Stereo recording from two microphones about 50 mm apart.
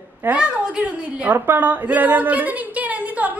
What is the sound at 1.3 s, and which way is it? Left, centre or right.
A woman's voice, right.